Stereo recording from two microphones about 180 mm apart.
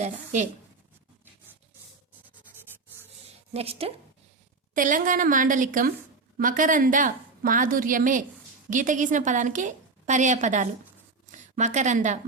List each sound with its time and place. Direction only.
3.5 s a woman's voice: 35° right (ahead or behind)
4.7 s a woman's voice: 45° right (ahead or behind)